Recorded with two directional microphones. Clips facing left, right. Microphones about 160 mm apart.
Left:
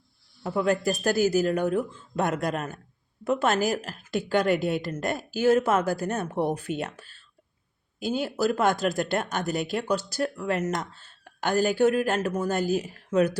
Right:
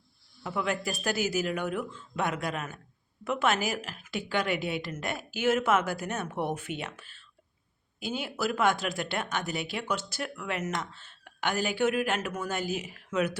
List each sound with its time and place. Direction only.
0.4 s a woman's voice: 40° left (ahead or behind)